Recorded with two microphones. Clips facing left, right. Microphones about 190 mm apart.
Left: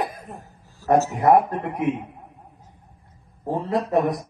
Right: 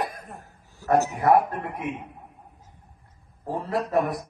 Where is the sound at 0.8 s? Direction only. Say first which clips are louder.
Left 3 dB; 15° right (ahead or behind).